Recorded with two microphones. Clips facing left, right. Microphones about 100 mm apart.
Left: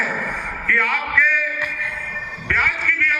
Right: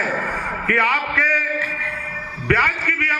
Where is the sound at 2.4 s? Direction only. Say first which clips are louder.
Right 3 dB; 60° right (ahead or behind).